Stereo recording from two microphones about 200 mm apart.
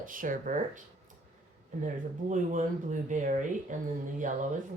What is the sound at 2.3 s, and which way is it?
Speech, 40° right (ahead or behind).